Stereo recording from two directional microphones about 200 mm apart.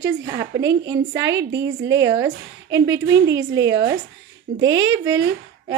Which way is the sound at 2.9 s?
65° right (ahead or behind).